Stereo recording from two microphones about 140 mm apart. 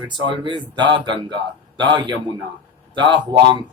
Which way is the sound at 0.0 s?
35° right (ahead or behind).